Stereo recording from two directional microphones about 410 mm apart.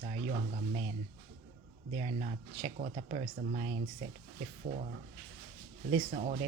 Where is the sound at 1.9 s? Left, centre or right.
Centre.